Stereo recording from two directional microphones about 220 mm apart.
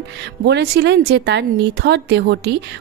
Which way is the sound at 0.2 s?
50° right (ahead or behind).